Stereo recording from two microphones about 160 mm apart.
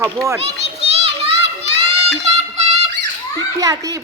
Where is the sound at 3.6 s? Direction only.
20° right (ahead or behind).